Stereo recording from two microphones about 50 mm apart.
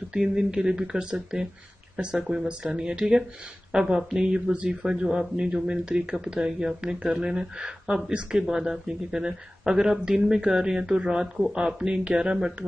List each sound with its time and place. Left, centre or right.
0.1 s speech: centre